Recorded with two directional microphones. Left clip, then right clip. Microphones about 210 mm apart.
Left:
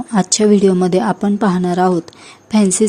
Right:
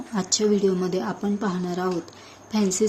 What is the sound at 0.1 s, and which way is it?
A woman's voice, 50° left (ahead or behind).